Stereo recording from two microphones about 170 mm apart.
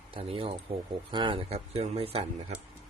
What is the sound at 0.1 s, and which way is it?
Speech, 35° right (ahead or behind).